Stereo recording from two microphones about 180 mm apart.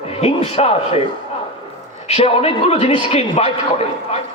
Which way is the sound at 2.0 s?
35° left (ahead or behind).